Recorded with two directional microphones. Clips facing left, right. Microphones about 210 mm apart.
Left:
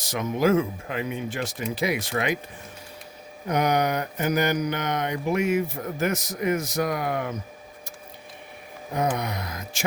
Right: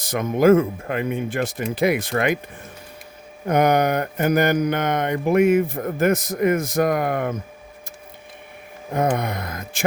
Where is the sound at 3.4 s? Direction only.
55° right (ahead or behind).